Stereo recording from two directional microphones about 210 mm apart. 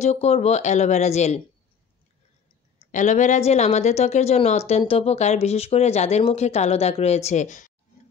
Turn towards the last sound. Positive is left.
turn(degrees=35)  # may be behind; listen again after turning